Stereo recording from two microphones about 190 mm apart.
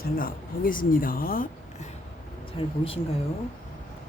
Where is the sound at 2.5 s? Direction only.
30° left (ahead or behind).